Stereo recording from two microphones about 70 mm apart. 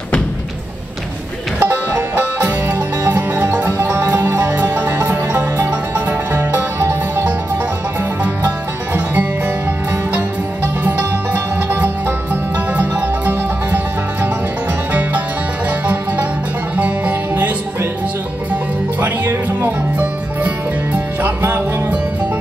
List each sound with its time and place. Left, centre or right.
1.6 s music: right
4.6 s music: right
8.2 s music: right
10.6 s music: right
12.5 s music: right
14.9 s music: right
16.7 s music: right
18.9 s music: right